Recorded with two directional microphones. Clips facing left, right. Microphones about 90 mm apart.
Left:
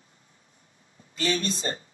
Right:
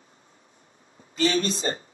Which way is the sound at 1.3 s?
50° right (ahead or behind).